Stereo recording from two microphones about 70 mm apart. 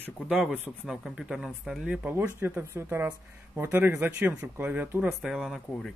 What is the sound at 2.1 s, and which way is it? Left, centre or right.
A man's voice, right.